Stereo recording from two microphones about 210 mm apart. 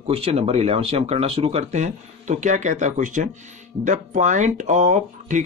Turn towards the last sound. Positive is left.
turn(degrees=-35)  # may be behind; listen again after turning